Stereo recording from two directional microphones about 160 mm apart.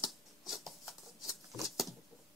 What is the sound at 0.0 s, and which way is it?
Scissors, centre (ahead or behind).